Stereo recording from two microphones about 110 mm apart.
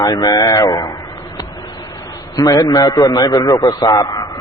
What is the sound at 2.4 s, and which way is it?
A man's voice, 35° left (ahead or behind).